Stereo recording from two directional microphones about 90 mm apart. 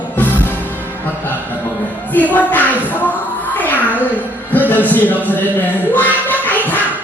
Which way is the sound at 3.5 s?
20° left (ahead or behind).